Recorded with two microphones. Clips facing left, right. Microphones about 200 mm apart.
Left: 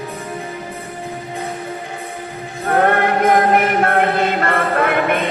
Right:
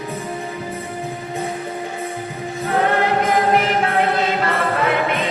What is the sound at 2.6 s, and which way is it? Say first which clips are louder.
Music: left 3 dB; 55° left (ahead or behind).